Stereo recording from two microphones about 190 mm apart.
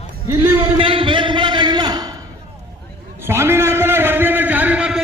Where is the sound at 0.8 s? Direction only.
30° right (ahead or behind).